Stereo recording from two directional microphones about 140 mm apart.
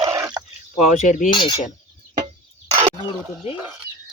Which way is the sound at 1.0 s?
60° left (ahead or behind).